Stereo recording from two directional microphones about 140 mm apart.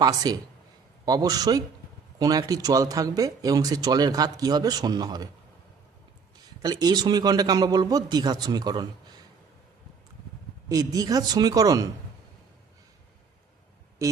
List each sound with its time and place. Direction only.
0.0 s speech: 25° right (ahead or behind)
6.6 s speech: 30° right (ahead or behind)
10.7 s speech: 25° right (ahead or behind)